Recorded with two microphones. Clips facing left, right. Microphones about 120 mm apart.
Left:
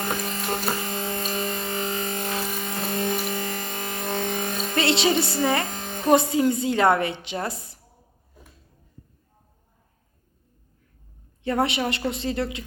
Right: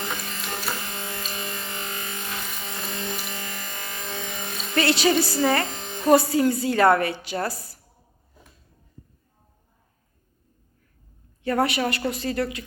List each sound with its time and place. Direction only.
0.3 s music: 35° left (ahead or behind)
4.7 s a woman's voice: 25° left (ahead or behind)
5.7 s music: 40° left (ahead or behind)
6.1 s a woman's voice: 20° left (ahead or behind)
11.4 s a woman's voice: 25° left (ahead or behind)